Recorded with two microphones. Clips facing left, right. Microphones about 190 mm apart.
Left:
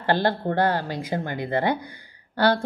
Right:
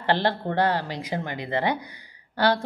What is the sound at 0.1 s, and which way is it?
A woman's voice, 45° left (ahead or behind).